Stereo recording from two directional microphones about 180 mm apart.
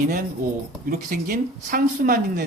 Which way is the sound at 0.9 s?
50° right (ahead or behind).